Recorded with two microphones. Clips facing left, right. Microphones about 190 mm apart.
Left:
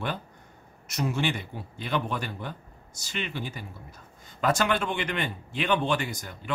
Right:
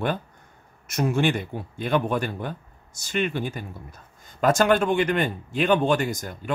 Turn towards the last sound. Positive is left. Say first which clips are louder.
# right 6 dB
turn(degrees=-45)  # may be behind; listen again after turning